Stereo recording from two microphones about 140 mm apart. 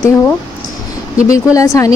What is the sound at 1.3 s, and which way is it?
Speech, 25° left (ahead or behind).